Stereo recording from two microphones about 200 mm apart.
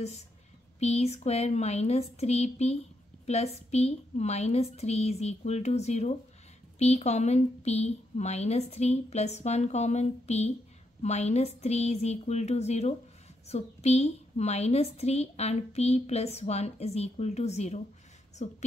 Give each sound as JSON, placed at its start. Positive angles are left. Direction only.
{"t": 0.7, "sound": "a woman's voice", "side_deg": 35}